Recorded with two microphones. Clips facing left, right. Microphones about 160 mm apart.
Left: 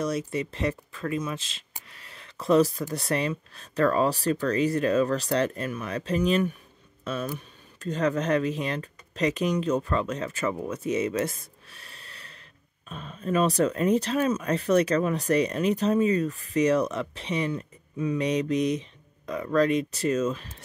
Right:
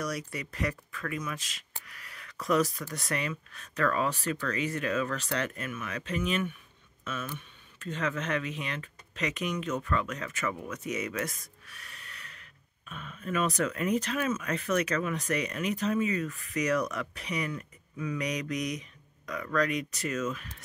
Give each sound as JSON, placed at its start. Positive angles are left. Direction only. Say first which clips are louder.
{"t": 0.0, "sound": "speech", "louder": "left 7 dB", "side_deg": 25}